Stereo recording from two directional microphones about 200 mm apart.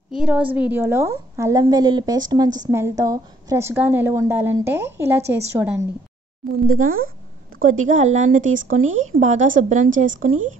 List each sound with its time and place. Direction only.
0.1 s a woman's voice: 5° right (ahead or behind)
6.6 s speech: 45° right (ahead or behind)